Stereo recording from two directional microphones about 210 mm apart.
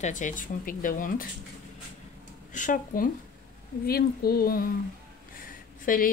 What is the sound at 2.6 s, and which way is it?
Speech, 40° left (ahead or behind).